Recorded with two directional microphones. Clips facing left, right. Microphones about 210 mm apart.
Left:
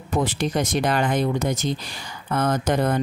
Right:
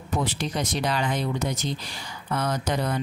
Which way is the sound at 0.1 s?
50° left (ahead or behind).